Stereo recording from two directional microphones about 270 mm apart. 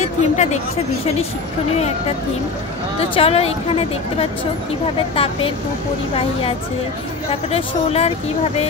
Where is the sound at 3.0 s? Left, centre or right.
Left.